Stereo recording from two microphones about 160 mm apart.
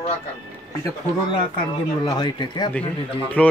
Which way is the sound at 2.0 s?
25° left (ahead or behind).